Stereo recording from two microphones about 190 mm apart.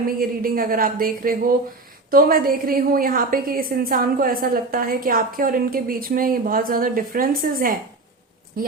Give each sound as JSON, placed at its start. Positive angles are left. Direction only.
{"t": 0.2, "sound": "a woman's voice", "side_deg": -50}